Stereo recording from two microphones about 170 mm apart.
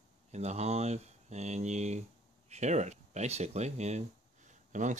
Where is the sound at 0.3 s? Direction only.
40° right (ahead or behind).